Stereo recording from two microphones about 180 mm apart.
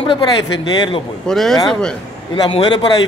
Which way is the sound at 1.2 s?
Centre (ahead or behind).